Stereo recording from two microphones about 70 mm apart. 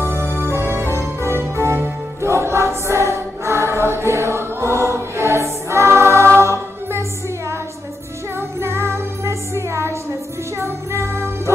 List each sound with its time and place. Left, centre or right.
0.0 s music: right
2.2 s choir: right
8.4 s music: right